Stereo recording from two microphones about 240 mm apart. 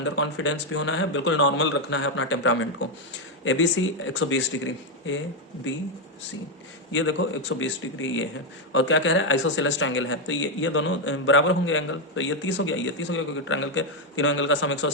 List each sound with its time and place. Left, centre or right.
0.0 s speech: left
6.9 s speech: left